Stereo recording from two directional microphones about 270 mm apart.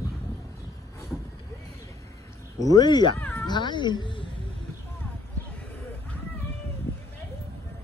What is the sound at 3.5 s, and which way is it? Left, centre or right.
Speech, centre.